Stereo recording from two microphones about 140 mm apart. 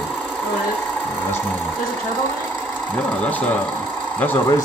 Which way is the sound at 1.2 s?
15° left (ahead or behind).